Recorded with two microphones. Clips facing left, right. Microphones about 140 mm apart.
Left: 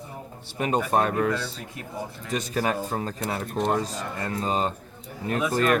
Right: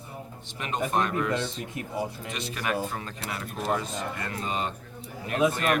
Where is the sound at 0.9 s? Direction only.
40° left (ahead or behind).